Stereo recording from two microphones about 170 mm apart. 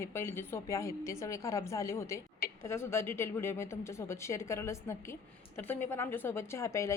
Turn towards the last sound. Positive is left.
turn(degrees=15)  # may be behind; listen again after turning